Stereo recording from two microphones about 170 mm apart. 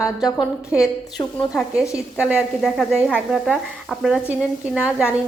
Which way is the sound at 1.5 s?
5° right (ahead or behind).